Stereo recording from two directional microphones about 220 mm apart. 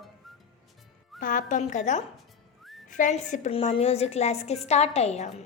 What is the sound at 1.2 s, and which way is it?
A woman's voice, 35° left (ahead or behind).